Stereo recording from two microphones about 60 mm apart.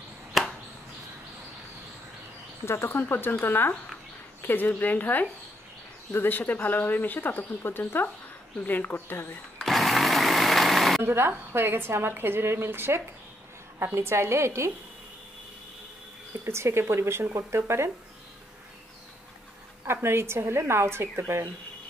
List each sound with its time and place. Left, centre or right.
0.3 s chop: centre
2.6 s speech: left
9.6 s sewing machine: centre
11.0 s a woman's voice: right
16.4 s speech: right
19.8 s speech: right